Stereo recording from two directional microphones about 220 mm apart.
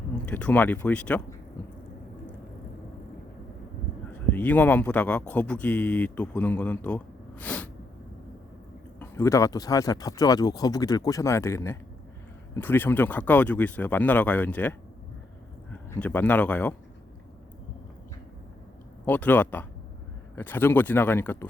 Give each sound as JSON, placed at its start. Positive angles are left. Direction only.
{"t": 0.3, "sound": "speech", "side_deg": 5}
{"t": 4.3, "sound": "speech", "side_deg": 5}
{"t": 9.0, "sound": "speech", "side_deg": 10}
{"t": 16.0, "sound": "speech", "side_deg": 5}
{"t": 19.0, "sound": "speech", "side_deg": 5}